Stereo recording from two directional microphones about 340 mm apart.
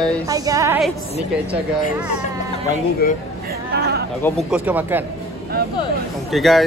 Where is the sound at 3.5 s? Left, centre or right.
Right.